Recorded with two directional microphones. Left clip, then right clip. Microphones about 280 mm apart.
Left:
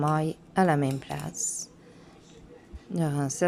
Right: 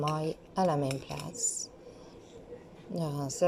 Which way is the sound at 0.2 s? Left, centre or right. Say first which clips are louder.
Left 4 dB; left.